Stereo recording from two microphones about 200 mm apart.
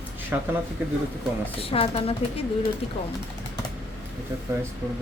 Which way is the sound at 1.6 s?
30° left (ahead or behind).